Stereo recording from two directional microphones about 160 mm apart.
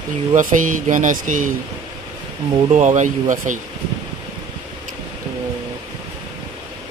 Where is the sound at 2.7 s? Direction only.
50° right (ahead or behind).